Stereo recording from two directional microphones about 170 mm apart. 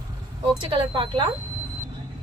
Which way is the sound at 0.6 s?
30° right (ahead or behind).